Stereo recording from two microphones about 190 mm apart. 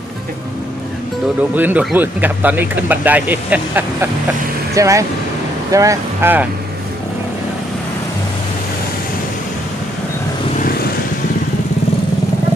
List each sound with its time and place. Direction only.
1.5 s speech: 10° right (ahead or behind)